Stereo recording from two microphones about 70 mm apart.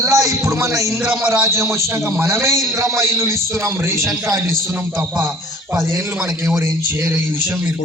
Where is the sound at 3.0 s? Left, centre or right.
Right.